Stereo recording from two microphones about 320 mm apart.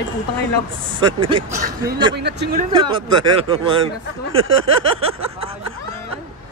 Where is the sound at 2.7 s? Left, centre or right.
Centre.